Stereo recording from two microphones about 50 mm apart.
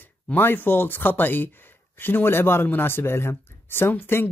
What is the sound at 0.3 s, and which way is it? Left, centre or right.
Speech, left.